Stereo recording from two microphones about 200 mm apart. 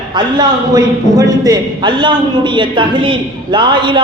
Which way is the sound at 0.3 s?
20° right (ahead or behind).